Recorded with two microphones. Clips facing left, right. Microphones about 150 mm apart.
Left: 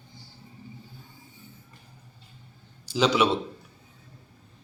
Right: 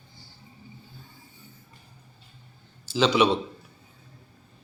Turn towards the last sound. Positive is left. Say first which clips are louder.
# right 1 dB
turn(degrees=5)  # may be behind; listen again after turning